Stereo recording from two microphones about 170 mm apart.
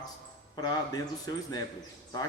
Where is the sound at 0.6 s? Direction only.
25° left (ahead or behind).